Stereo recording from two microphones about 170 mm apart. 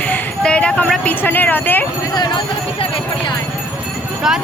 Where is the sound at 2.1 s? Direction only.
25° left (ahead or behind).